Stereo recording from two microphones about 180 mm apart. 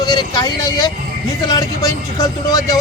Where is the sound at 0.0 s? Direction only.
25° left (ahead or behind).